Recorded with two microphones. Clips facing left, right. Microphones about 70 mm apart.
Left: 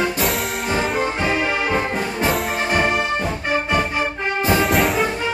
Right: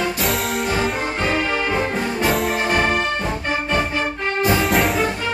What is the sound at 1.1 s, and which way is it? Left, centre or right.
Music, centre.